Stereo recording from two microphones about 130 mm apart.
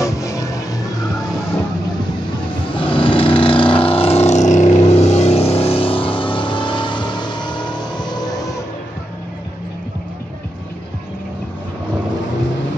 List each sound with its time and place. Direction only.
0.0 s music: 25° left (ahead or behind)
2.9 s vehicle: 45° left (ahead or behind)